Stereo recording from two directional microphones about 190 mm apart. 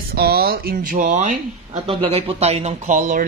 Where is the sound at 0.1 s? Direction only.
55° right (ahead or behind).